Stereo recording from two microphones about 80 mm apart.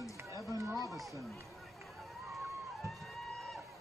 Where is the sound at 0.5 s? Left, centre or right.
Right.